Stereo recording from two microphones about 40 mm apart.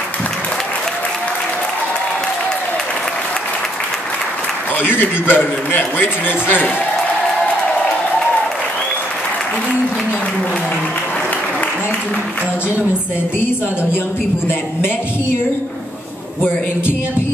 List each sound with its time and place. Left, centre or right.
4.7 s a man's voice: left